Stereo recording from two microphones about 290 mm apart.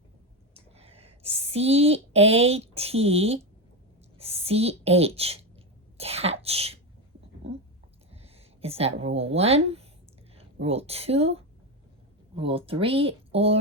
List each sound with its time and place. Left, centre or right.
0.5 s a woman's voice: centre
6.0 s cough: right
6.4 s speech: centre
8.1 s a woman's voice: right